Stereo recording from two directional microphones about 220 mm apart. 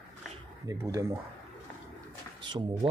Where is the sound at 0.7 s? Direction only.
15° right (ahead or behind).